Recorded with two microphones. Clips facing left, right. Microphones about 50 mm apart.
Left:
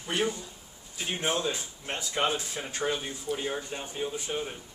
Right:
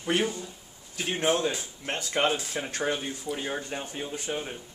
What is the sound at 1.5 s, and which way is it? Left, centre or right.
Speech, right.